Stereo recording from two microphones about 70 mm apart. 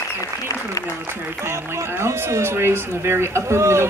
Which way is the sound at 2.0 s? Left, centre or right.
Right.